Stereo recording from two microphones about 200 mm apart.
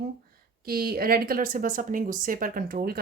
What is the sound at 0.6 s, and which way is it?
Speech, 50° right (ahead or behind).